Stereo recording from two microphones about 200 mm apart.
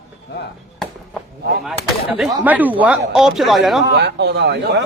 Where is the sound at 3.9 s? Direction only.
55° right (ahead or behind).